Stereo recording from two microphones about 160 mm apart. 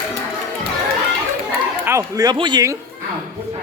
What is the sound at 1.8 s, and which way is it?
Speech, 20° right (ahead or behind).